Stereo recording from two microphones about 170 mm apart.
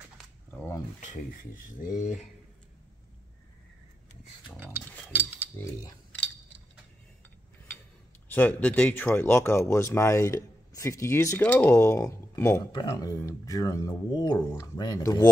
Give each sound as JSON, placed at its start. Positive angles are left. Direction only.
{"t": 0.5, "sound": "a sound", "side_deg": 15}
{"t": 1.0, "sound": "speech", "side_deg": 50}
{"t": 5.1, "sound": "cutlery", "side_deg": -10}
{"t": 8.3, "sound": "speech", "side_deg": 10}